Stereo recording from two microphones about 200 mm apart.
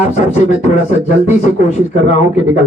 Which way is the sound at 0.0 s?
35° left (ahead or behind).